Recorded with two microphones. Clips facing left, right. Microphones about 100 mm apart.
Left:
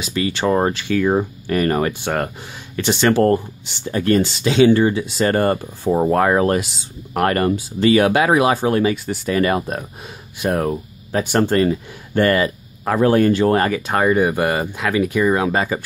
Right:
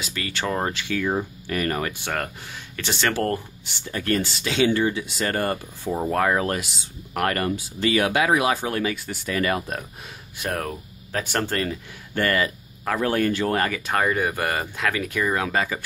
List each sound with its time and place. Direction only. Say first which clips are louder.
0.0 s speech: left 9 dB; 20° left (ahead or behind)
4.6 s speech: left 7 dB; 35° left (ahead or behind)
10.3 s speech: left 9 dB; 15° left (ahead or behind)